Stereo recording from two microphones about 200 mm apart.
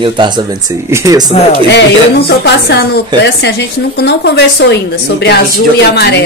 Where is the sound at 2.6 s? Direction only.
55° left (ahead or behind).